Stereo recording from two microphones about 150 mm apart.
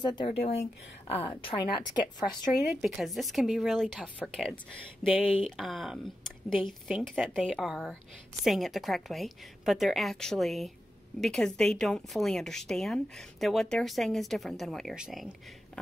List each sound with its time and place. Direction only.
0.0 s speech: 30° left (ahead or behind)
2.6 s a woman's voice: centre (ahead or behind)